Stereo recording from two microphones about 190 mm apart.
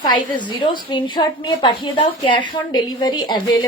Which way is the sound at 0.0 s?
25° left (ahead or behind).